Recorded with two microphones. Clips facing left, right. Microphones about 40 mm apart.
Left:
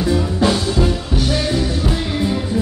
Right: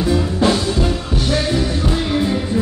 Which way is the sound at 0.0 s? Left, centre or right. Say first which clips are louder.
Even; centre.